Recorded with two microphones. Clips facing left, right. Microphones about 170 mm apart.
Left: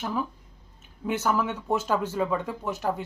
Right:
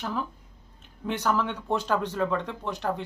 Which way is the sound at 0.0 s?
10° left (ahead or behind).